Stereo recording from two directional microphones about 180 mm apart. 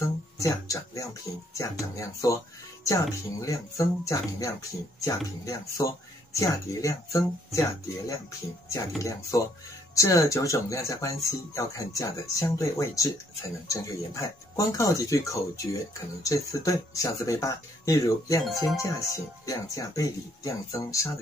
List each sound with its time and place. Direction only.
0.0 s speech: 20° left (ahead or behind)
18.4 s speech: centre (ahead or behind)
18.8 s speech: 15° left (ahead or behind)